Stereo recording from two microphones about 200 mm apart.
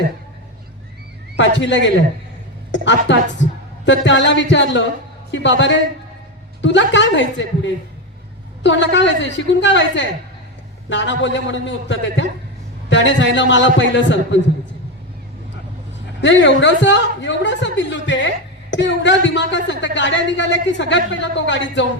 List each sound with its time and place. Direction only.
1.4 s speech: 65° left (ahead or behind)
16.2 s speech: 65° left (ahead or behind)